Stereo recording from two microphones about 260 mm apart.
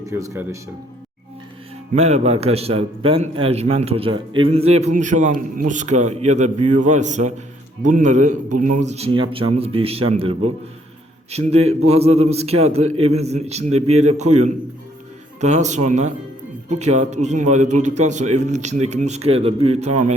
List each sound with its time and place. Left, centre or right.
0.0 s speech: centre
1.9 s a man's voice: right
15.4 s a man's voice: right